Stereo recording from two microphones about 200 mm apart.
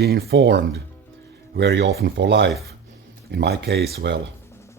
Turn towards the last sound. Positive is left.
turn(degrees=-55)  # may be behind; listen again after turning